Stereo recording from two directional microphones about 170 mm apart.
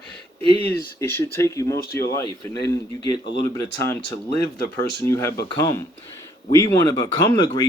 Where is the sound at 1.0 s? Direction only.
15° left (ahead or behind).